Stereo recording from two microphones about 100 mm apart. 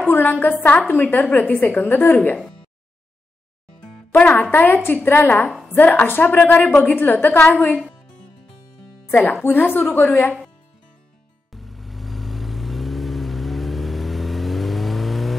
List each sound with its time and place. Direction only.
0.0 s a woman's voice: 15° left (ahead or behind)
4.3 s a woman's voice: 20° left (ahead or behind)
7.6 s music: 10° left (ahead or behind)
9.3 s a woman's voice: 20° left (ahead or behind)
11.5 s vehicle: centre (ahead or behind)